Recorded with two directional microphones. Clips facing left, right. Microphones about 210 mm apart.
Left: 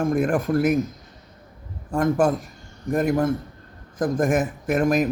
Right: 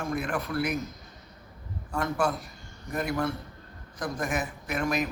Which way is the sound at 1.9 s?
50° left (ahead or behind).